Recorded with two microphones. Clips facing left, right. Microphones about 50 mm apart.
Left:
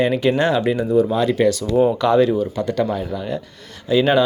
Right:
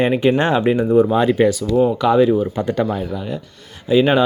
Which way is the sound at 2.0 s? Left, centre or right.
Centre.